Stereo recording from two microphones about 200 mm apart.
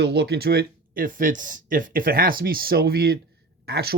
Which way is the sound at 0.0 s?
55° right (ahead or behind).